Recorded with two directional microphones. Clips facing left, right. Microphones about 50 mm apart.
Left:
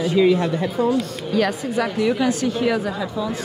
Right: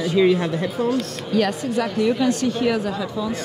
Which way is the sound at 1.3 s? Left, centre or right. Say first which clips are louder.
Even; centre.